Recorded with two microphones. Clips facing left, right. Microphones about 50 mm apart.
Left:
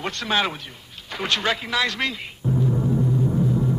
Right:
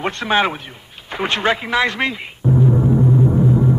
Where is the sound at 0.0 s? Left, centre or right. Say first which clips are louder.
Right 6 dB; right.